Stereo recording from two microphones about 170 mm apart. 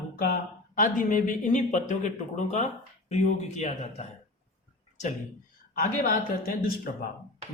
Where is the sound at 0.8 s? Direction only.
50° left (ahead or behind).